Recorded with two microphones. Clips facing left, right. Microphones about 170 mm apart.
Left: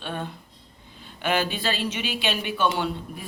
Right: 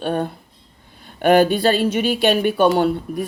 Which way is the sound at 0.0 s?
45° right (ahead or behind).